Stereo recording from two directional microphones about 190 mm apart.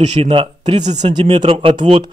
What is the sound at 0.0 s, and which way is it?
Speech, 30° right (ahead or behind).